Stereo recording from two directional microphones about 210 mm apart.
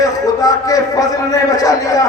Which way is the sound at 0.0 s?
15° left (ahead or behind).